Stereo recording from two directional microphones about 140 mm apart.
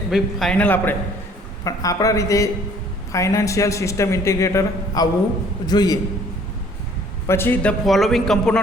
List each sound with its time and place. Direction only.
0.1 s a man's voice: centre (ahead or behind)
1.6 s a man's voice: 25° left (ahead or behind)
7.3 s a man's voice: 15° left (ahead or behind)